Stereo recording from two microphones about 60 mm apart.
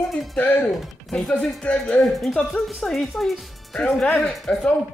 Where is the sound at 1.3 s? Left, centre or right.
Centre.